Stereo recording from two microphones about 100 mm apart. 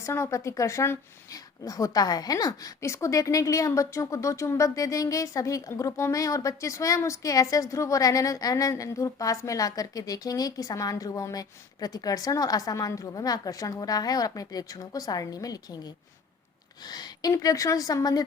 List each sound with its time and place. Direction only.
0.0 s speech: 30° left (ahead or behind)
16.9 s speech: 40° left (ahead or behind)